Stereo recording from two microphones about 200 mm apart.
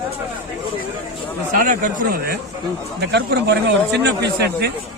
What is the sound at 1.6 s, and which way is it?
Speech, 45° right (ahead or behind).